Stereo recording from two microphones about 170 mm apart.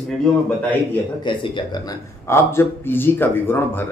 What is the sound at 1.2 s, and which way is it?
A man's voice, 30° left (ahead or behind).